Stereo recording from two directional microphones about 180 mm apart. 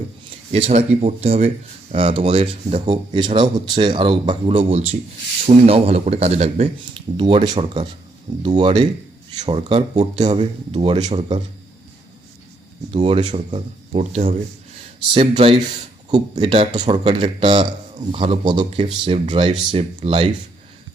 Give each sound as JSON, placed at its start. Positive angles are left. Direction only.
{"t": 0.5, "sound": "a man's voice", "side_deg": -35}
{"t": 12.9, "sound": "a man's voice", "side_deg": -30}
{"t": 13.5, "sound": "speech", "side_deg": -40}
{"t": 15.1, "sound": "a man's voice", "side_deg": -30}